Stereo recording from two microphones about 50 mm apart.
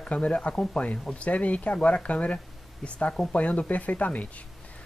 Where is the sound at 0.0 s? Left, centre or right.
Left.